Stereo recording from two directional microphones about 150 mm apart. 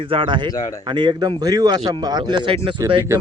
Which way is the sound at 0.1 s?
35° right (ahead or behind).